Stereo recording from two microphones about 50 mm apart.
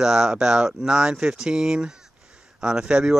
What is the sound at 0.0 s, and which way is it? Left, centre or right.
Speech, centre.